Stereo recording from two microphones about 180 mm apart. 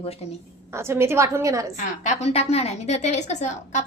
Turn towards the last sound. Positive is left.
turn(degrees=40)  # may be behind; listen again after turning